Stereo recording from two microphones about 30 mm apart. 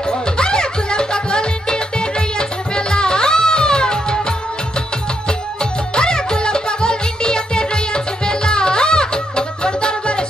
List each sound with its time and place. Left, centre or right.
0.1 s music: left
5.9 s music: left